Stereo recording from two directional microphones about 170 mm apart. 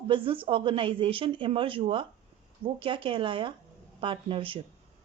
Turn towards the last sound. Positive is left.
turn(degrees=-30)  # may be behind; listen again after turning